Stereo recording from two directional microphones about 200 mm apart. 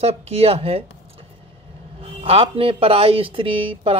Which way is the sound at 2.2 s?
30° right (ahead or behind).